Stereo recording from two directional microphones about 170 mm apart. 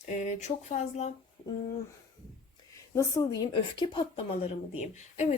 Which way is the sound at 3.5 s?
30° left (ahead or behind).